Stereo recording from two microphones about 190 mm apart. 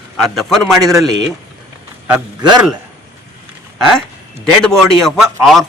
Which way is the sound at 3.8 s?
Centre (ahead or behind).